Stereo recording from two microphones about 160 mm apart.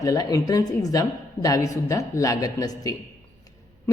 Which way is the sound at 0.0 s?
25° left (ahead or behind).